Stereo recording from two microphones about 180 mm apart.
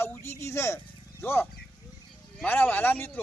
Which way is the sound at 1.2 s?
10° left (ahead or behind).